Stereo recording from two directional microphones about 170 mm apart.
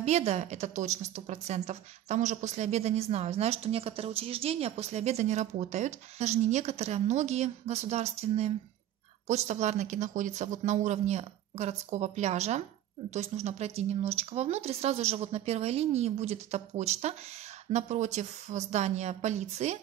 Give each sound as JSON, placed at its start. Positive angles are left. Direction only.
{"t": 0.0, "sound": "a woman's voice", "side_deg": -40}